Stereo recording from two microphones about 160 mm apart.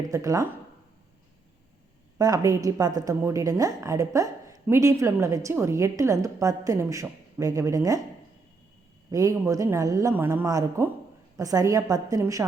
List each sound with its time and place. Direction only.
0.1 s a woman's voice: 20° right (ahead or behind)
2.1 s a woman's voice: 20° right (ahead or behind)
9.1 s a woman's voice: 20° right (ahead or behind)